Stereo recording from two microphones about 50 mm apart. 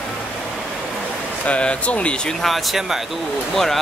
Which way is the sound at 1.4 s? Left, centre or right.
Left.